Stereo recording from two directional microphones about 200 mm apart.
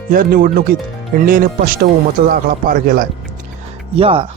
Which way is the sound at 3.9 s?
30° right (ahead or behind).